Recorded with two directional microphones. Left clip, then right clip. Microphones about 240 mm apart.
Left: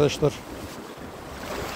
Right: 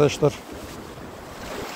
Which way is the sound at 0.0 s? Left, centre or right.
Centre.